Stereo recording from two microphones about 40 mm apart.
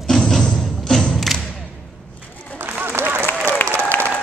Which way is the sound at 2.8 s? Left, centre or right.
Right.